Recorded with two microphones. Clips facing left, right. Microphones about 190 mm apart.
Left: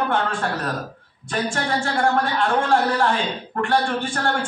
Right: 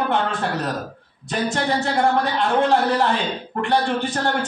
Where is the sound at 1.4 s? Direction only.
20° right (ahead or behind).